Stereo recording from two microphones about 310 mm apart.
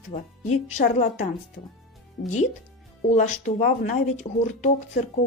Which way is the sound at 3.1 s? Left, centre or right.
Left.